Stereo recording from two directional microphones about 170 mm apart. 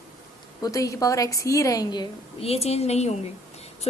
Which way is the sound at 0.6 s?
20° left (ahead or behind).